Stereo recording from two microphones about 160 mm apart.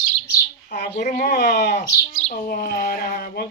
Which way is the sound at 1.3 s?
90° left.